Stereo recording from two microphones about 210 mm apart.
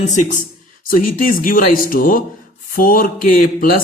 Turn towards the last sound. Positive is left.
turn(degrees=40)  # may be behind; listen again after turning